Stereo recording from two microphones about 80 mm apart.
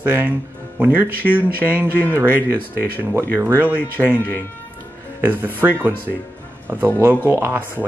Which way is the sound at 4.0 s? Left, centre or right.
Centre.